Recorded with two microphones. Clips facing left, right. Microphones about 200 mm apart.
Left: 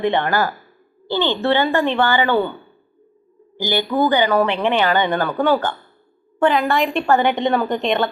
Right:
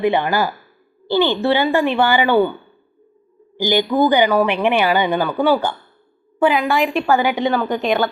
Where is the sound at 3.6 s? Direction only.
15° right (ahead or behind).